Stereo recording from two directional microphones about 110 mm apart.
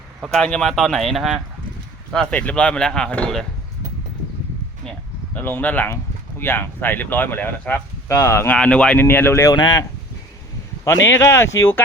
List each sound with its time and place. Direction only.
0.3 s speech: 5° left (ahead or behind)
2.1 s speech: 10° left (ahead or behind)
5.3 s speech: 15° left (ahead or behind)
8.5 s speech: 10° left (ahead or behind)
9.0 s speech: 20° left (ahead or behind)
9.6 s speech: 40° left (ahead or behind)
10.8 s speech: 25° left (ahead or behind)